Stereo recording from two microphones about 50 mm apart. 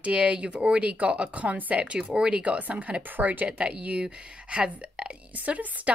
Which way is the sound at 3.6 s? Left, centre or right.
Right.